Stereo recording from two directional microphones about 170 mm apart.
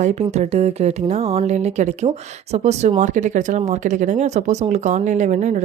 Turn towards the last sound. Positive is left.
turn(degrees=-45)  # may be behind; listen again after turning